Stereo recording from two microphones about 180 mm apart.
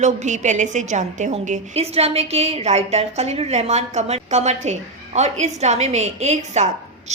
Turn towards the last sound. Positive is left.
turn(degrees=-40)  # may be behind; listen again after turning